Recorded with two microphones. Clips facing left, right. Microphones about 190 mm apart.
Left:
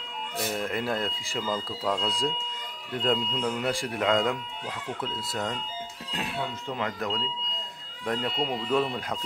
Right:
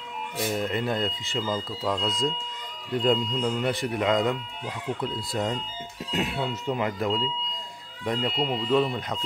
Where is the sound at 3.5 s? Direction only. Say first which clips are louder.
Right 1 dB; 5° left (ahead or behind).